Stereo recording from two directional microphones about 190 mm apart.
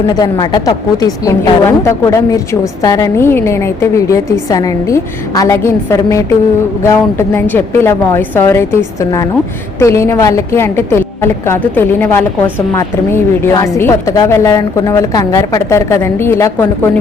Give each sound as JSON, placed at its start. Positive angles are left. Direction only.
{"t": 0.1, "sound": "a woman's voice", "side_deg": 20}